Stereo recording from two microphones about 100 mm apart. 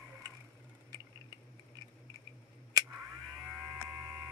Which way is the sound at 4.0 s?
25° right (ahead or behind).